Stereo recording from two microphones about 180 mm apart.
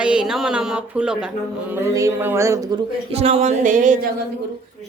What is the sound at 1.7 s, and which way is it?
Music, 15° right (ahead or behind).